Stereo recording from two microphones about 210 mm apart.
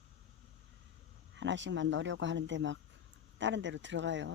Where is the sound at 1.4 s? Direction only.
60° right (ahead or behind).